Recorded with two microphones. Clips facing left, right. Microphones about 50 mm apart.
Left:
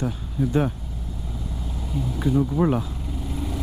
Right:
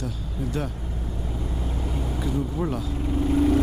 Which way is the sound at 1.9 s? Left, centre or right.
Right.